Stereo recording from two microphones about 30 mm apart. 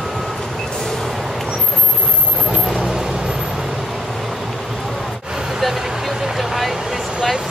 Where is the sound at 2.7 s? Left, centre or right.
Right.